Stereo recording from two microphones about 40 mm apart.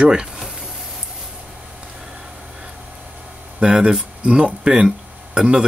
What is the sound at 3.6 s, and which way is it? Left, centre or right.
Speech, right.